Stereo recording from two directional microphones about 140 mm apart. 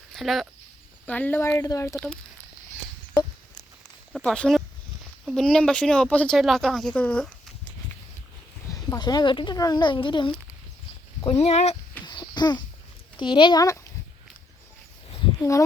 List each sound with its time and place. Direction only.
0.1 s speech: centre (ahead or behind)
1.0 s speech: 10° left (ahead or behind)
4.1 s speech: 5° left (ahead or behind)
8.7 s speech: 25° left (ahead or behind)
11.3 s speech: 45° left (ahead or behind)
12.0 s wheeze: 30° left (ahead or behind)
13.1 s speech: 35° left (ahead or behind)
15.4 s speech: 20° left (ahead or behind)